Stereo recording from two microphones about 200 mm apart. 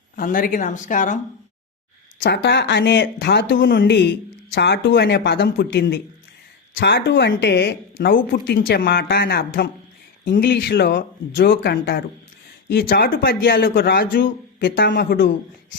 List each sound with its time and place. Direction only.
0.2 s a woman's voice: 45° left (ahead or behind)
2.2 s a woman's voice: 60° left (ahead or behind)